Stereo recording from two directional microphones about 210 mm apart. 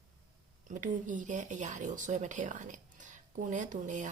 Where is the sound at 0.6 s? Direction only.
40° right (ahead or behind).